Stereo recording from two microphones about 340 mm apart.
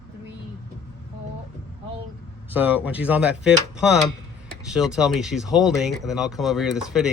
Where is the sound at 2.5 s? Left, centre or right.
Centre.